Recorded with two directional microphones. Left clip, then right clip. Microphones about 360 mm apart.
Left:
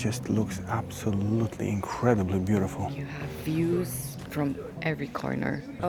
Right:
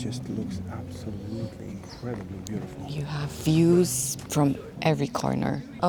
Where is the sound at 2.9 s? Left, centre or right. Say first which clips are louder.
Right 1 dB; right.